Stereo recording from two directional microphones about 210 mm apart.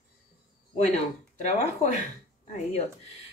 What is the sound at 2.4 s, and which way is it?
Speech, 35° left (ahead or behind).